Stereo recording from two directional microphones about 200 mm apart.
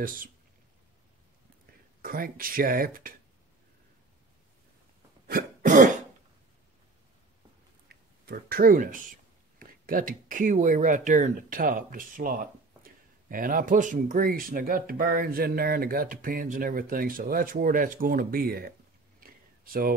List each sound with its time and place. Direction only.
2.0 s speech: 45° right (ahead or behind)
5.2 s cough: 45° right (ahead or behind)
7.9 s speech: 50° right (ahead or behind)
19.1 s a sound: 45° right (ahead or behind)